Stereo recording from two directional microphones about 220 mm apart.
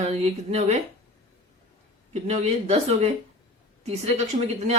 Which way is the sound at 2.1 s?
30° right (ahead or behind).